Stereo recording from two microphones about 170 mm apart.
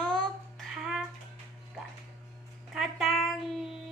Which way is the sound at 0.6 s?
Centre (ahead or behind).